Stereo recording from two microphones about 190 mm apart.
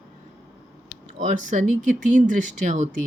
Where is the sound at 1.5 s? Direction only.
40° right (ahead or behind).